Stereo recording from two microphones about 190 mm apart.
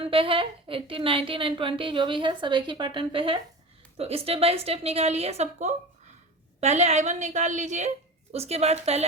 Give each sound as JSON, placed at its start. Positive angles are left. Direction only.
{"t": 0.0, "sound": "a woman's voice", "side_deg": -30}